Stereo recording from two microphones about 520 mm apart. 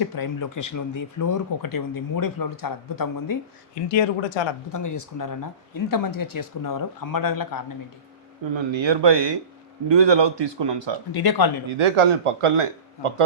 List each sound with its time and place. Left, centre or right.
0.0 s speech: left
3.8 s speech: left
4.7 s speech: left
8.5 s speech: right
11.1 s speech: left
11.8 s speech: right